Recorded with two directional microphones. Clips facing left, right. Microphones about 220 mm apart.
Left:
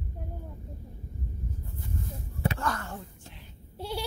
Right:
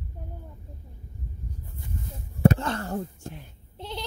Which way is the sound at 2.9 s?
50° right (ahead or behind).